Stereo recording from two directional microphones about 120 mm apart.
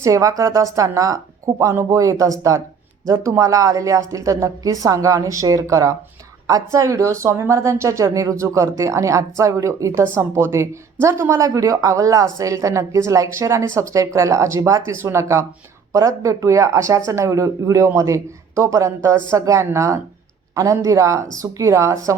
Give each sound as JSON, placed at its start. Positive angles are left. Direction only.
{"t": 0.0, "sound": "speech", "side_deg": -25}